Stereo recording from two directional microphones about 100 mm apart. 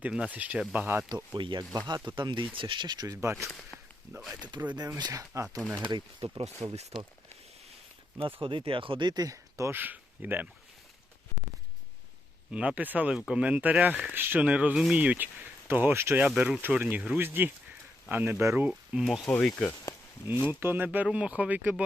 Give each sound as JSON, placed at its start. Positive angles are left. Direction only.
{"t": 0.0, "sound": "speech", "side_deg": -10}
{"t": 1.1, "sound": "speech", "side_deg": -50}
{"t": 3.2, "sound": "speech", "side_deg": -30}
{"t": 4.4, "sound": "speech", "side_deg": -45}
{"t": 5.9, "sound": "speech", "side_deg": -55}
{"t": 8.4, "sound": "speech", "side_deg": -60}
{"t": 12.5, "sound": "speech", "side_deg": -10}
{"t": 16.3, "sound": "speech", "side_deg": -5}
{"t": 16.6, "sound": "speech", "side_deg": -20}
{"t": 17.2, "sound": "speech", "side_deg": -20}
{"t": 18.7, "sound": "speech", "side_deg": -5}
{"t": 19.2, "sound": "speech", "side_deg": 10}
{"t": 20.5, "sound": "speech", "side_deg": -20}